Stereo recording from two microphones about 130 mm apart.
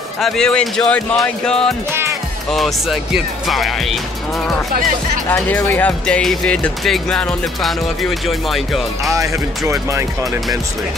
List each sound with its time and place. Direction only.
0.2 s speech: 5° left (ahead or behind)
5.3 s speech: 15° left (ahead or behind)
9.7 s speech: 20° right (ahead or behind)